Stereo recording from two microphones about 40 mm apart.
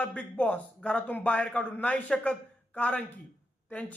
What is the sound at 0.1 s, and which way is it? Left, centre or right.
Speech, left.